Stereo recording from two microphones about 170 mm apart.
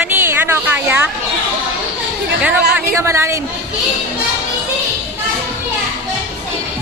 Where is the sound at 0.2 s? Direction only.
15° right (ahead or behind).